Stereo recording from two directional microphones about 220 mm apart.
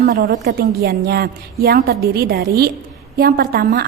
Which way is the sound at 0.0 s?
45° right (ahead or behind).